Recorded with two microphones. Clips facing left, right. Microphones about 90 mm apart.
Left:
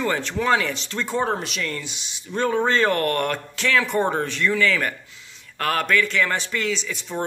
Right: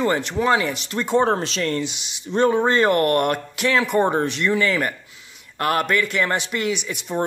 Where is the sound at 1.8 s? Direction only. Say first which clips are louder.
Right 9 dB; 20° right (ahead or behind).